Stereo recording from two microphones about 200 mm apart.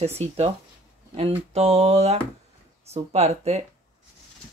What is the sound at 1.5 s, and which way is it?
Speech, 30° right (ahead or behind).